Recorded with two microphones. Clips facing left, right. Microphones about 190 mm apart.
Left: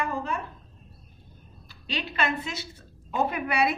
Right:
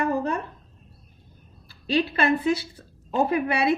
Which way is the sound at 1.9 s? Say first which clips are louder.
Right 7 dB; 35° right (ahead or behind).